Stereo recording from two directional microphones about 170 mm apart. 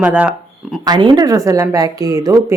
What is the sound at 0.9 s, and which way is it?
Speech, 25° right (ahead or behind).